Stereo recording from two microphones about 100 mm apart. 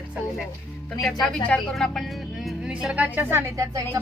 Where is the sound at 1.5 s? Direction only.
5° left (ahead or behind).